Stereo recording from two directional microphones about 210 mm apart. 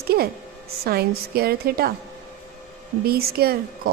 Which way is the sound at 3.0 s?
45° right (ahead or behind).